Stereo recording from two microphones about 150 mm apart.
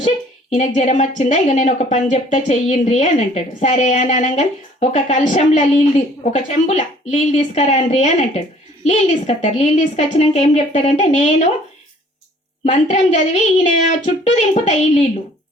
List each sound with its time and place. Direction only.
0.5 s a woman's voice: 55° left (ahead or behind)
12.6 s a woman's voice: 50° left (ahead or behind)